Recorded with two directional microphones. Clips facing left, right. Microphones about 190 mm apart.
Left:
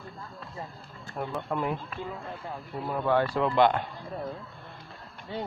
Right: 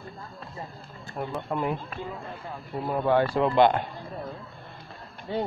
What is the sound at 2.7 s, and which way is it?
Speech, 20° right (ahead or behind).